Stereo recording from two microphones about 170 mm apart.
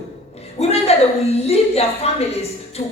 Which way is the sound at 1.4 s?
35° left (ahead or behind).